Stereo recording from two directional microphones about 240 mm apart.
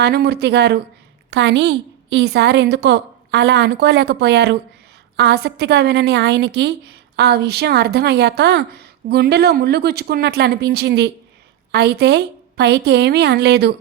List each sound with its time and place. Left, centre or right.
0.0 s a woman's voice: right